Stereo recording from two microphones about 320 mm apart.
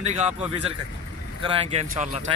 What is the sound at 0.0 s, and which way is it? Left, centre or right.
Speech, right.